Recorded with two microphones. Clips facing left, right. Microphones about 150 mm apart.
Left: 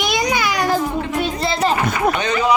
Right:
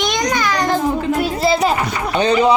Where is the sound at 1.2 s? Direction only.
5° right (ahead or behind).